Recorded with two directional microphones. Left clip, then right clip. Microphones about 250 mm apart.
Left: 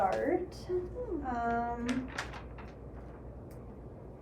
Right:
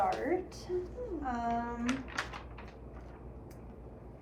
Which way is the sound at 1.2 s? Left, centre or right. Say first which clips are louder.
Left 1 dB; centre.